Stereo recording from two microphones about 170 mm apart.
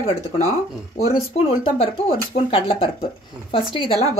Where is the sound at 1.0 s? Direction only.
35° left (ahead or behind).